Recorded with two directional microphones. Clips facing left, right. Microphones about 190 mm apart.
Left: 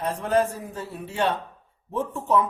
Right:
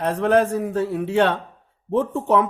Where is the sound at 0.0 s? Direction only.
70° right (ahead or behind).